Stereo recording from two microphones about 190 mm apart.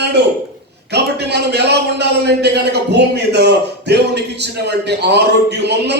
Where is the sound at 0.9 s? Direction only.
60° right (ahead or behind).